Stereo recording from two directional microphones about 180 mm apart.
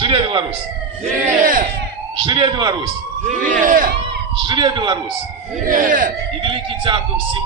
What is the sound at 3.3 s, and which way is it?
Speech, 45° right (ahead or behind).